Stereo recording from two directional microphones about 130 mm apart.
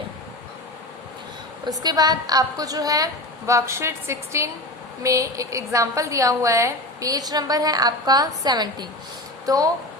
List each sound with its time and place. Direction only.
1.6 s a woman's voice: 30° right (ahead or behind)